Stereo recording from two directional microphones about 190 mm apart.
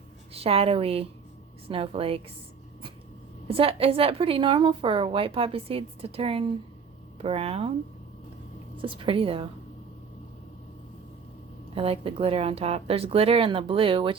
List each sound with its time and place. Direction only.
0.3 s a woman's voice: 30° right (ahead or behind)
3.4 s a woman's voice: 30° right (ahead or behind)
8.8 s a woman's voice: 25° right (ahead or behind)
11.7 s a woman's voice: 30° right (ahead or behind)